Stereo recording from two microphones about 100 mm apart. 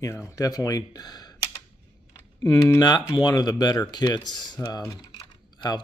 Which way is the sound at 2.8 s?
40° left (ahead or behind).